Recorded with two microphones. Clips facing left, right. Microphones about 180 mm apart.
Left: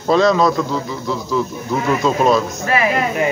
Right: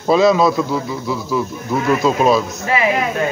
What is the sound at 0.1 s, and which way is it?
Speech, 5° right (ahead or behind).